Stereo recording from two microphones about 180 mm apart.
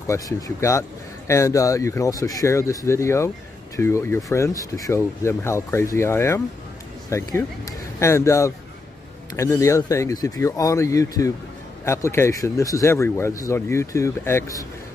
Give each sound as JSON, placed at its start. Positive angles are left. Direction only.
{"t": 0.0, "sound": "speech", "side_deg": 15}